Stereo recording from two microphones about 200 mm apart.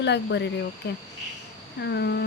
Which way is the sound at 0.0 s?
60° left (ahead or behind).